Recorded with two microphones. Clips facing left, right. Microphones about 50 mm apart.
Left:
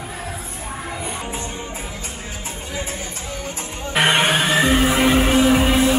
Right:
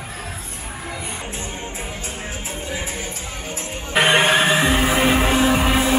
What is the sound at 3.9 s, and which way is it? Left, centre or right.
Music, right.